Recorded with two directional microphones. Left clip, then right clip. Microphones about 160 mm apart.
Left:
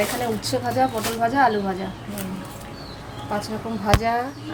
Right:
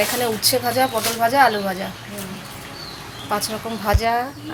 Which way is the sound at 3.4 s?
5° right (ahead or behind).